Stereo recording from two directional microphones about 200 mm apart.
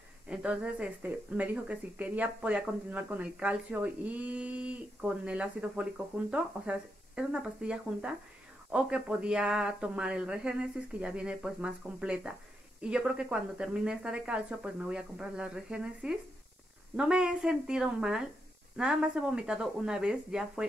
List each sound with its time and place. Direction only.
0.3 s speech: 5° right (ahead or behind)